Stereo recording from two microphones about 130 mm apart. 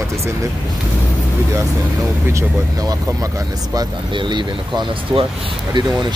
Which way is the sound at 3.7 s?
35° right (ahead or behind).